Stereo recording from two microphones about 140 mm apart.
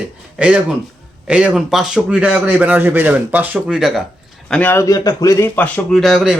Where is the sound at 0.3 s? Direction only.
10° right (ahead or behind).